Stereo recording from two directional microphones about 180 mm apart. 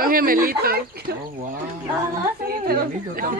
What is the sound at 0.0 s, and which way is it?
A woman's voice, 55° right (ahead or behind).